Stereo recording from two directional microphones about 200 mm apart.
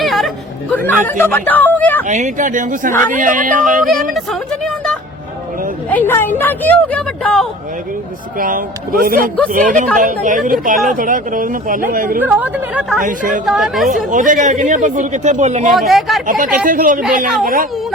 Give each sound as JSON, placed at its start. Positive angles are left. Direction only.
{"t": 0.0, "sound": "chatter", "side_deg": 0}
{"t": 0.7, "sound": "speech", "side_deg": 10}
{"t": 2.0, "sound": "a man's voice", "side_deg": -35}
{"t": 5.9, "sound": "speech", "side_deg": 10}
{"t": 8.4, "sound": "a man's voice", "side_deg": -45}
{"t": 12.2, "sound": "a woman's voice", "side_deg": -5}
{"t": 13.0, "sound": "a man's voice", "side_deg": -40}
{"t": 13.4, "sound": "speech", "side_deg": 0}
{"t": 13.9, "sound": "a man's voice", "side_deg": -40}
{"t": 15.7, "sound": "speech", "side_deg": 0}
{"t": 16.2, "sound": "a man's voice", "side_deg": -40}